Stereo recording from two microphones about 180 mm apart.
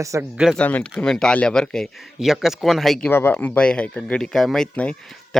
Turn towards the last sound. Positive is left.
turn(degrees=5)  # may be behind; listen again after turning